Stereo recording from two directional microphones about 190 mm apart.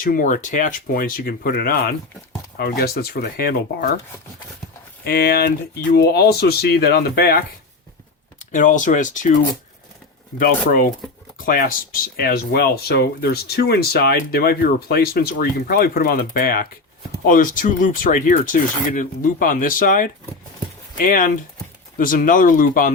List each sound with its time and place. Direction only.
0.0 s speech: 45° left (ahead or behind)
5.0 s speech: 55° left (ahead or behind)
8.4 s speech: 40° left (ahead or behind)
10.3 s speech: 50° left (ahead or behind)